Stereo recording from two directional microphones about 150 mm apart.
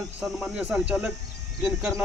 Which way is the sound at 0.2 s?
5° right (ahead or behind).